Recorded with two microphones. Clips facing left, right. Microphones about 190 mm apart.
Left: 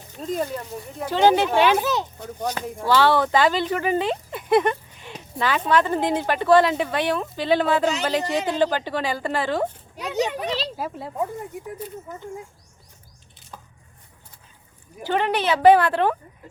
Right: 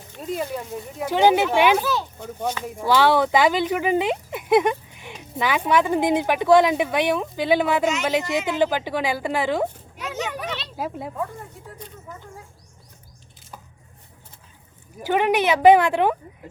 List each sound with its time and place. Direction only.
0.2 s speech: 5° right (ahead or behind)
1.8 s a child's voice: 20° left (ahead or behind)
2.8 s speech: 15° right (ahead or behind)
8.2 s speech: 35° left (ahead or behind)
8.5 s speech: 10° right (ahead or behind)
10.0 s a sound: 35° left (ahead or behind)
10.8 s speech: 15° right (ahead or behind)
11.8 s speech: 5° left (ahead or behind)
15.0 s speech: 10° right (ahead or behind)